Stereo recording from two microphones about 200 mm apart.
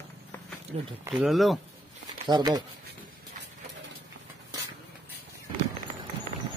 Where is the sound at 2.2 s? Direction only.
20° right (ahead or behind).